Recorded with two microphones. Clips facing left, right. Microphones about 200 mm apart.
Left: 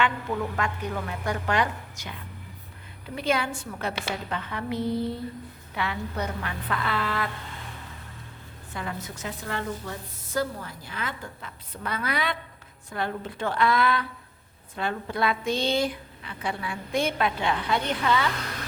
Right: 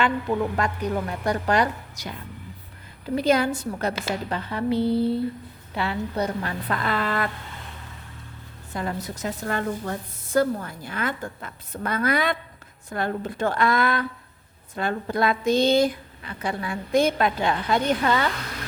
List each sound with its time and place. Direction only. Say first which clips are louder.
0.5 s a woman's voice: right 5 dB; 35° right (ahead or behind)
3.2 s a woman's voice: right 6 dB; 40° right (ahead or behind)
8.7 s a woman's voice: right 5 dB; 40° right (ahead or behind)